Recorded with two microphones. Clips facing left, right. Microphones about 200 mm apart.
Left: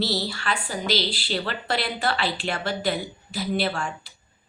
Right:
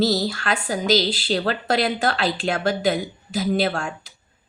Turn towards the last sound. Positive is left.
turn(degrees=-45)  # may be behind; listen again after turning